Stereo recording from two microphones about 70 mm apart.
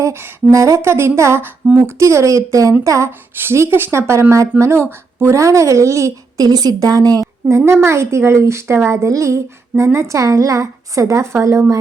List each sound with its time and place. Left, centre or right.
0.0 s speech: right
0.5 s speech: right
3.1 s speech: right
6.4 s a woman's voice: right
7.4 s speech: right